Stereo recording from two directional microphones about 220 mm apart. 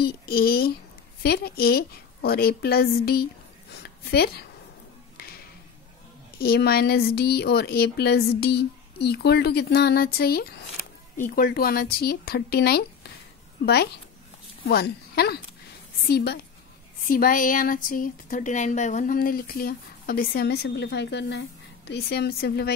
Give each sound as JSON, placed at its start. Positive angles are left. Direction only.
{"t": 0.0, "sound": "a woman's voice", "side_deg": 45}
{"t": 6.3, "sound": "a woman's voice", "side_deg": 45}
{"t": 14.7, "sound": "a woman's voice", "side_deg": 45}